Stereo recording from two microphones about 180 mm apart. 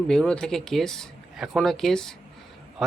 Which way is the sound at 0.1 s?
5° left (ahead or behind).